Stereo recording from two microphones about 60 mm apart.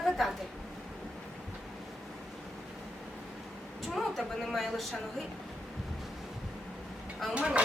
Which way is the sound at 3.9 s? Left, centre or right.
Centre.